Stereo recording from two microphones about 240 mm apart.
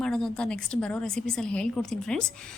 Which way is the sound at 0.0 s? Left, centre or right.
Centre.